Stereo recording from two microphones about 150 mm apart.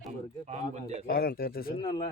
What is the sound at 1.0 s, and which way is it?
Speech, 80° left.